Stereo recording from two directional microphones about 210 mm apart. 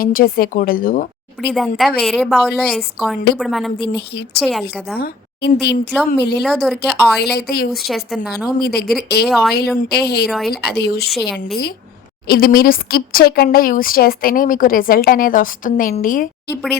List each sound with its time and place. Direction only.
0.0 s speech: 45° left (ahead or behind)
1.5 s speech: centre (ahead or behind)
4.9 s speech: 50° left (ahead or behind)
6.4 s speech: centre (ahead or behind)
7.2 s speech: 50° left (ahead or behind)
7.9 s speech: centre (ahead or behind)
8.5 s speech: 50° left (ahead or behind)
9.2 s speech: centre (ahead or behind)
9.6 s speech: 50° left (ahead or behind)
10.2 s speech: centre (ahead or behind)
10.5 s speech: 50° left (ahead or behind)
11.1 s speech: centre (ahead or behind)
12.3 s speech: 45° left (ahead or behind)